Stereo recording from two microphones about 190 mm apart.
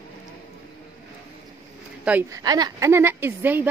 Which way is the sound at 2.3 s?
20° right (ahead or behind).